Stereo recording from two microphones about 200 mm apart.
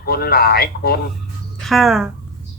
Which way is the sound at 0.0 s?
50° left (ahead or behind).